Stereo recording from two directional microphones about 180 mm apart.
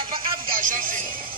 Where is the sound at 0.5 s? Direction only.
50° right (ahead or behind).